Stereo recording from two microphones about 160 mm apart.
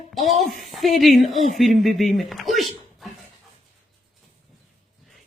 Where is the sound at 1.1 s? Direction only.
55° right (ahead or behind).